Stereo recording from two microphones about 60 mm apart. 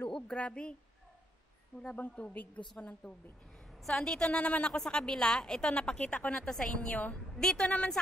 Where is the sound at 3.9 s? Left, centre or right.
Centre.